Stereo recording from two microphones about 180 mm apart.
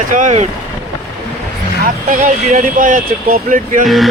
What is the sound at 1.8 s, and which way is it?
Speech, 50° right (ahead or behind).